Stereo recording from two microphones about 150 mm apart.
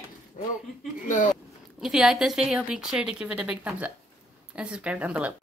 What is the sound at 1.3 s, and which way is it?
Speech, centre (ahead or behind).